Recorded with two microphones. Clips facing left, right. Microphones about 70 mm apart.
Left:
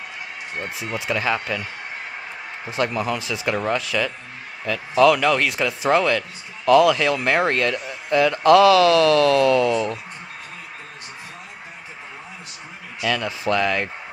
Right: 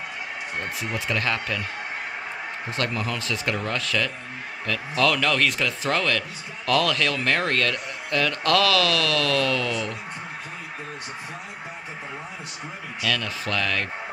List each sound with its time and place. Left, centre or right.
0.6 s speech: centre
2.7 s speech: centre
13.0 s speech: centre